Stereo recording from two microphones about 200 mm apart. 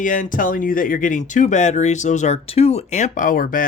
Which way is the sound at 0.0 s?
40° left (ahead or behind).